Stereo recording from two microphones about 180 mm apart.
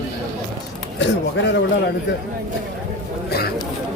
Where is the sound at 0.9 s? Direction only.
75° left (ahead or behind).